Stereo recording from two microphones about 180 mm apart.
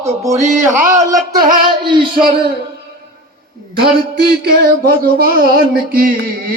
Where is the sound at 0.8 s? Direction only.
15° right (ahead or behind).